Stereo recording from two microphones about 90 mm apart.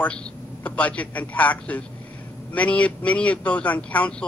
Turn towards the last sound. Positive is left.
turn(degrees=15)  # may be behind; listen again after turning